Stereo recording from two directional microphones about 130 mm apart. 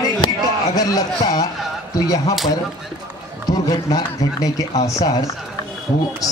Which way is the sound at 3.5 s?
30° left (ahead or behind).